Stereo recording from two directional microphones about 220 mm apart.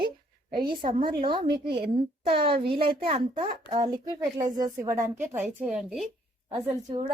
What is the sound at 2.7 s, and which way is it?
A woman's voice, 25° right (ahead or behind).